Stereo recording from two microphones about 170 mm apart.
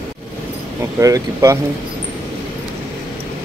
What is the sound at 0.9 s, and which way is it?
Speech, 20° right (ahead or behind).